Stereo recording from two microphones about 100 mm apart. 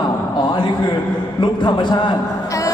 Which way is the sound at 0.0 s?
50° left (ahead or behind).